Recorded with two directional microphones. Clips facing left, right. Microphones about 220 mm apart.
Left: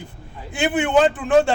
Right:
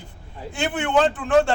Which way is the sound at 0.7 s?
5° left (ahead or behind).